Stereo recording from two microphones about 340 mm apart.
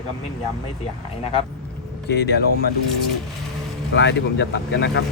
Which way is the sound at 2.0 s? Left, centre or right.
Left.